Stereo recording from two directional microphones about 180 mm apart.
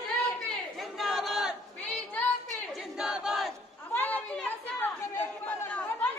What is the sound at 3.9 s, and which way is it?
Chatter, 10° left (ahead or behind).